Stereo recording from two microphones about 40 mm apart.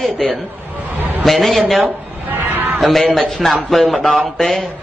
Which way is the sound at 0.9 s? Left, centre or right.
Right.